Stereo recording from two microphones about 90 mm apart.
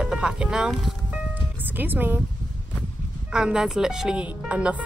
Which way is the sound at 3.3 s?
10° right (ahead or behind).